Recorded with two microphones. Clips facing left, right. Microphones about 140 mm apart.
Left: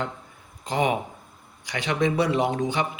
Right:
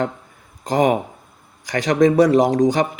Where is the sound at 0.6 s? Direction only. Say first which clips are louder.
Right 7 dB; 45° right (ahead or behind).